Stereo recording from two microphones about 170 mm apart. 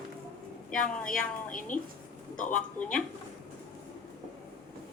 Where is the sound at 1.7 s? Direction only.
50° left (ahead or behind).